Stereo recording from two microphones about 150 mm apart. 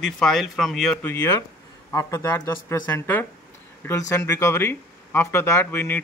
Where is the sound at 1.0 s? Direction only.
20° left (ahead or behind).